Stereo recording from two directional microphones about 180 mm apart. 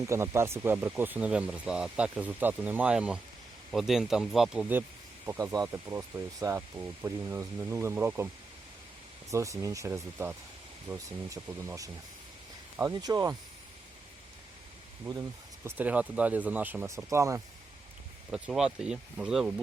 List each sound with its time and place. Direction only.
0.0 s speech: 15° right (ahead or behind)
9.3 s speech: 15° right (ahead or behind)
15.0 s speech: 15° right (ahead or behind)
18.3 s speech: 5° right (ahead or behind)